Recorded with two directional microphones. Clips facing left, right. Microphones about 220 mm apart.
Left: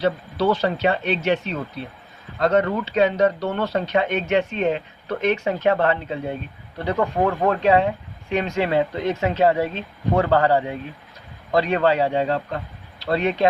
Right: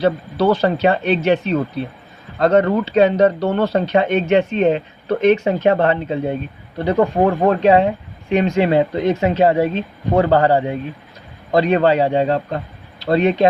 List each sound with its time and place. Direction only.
0.0 s speech: 40° right (ahead or behind); by 13.5 s 20° right (ahead or behind)